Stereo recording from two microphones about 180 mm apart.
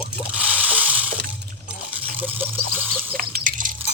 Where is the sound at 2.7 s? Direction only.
10° right (ahead or behind).